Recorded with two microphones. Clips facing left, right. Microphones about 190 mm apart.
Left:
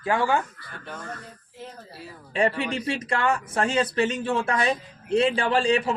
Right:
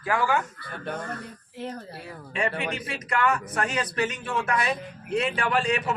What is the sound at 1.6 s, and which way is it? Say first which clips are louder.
Speech: right 5 dB; 65° right (ahead or behind).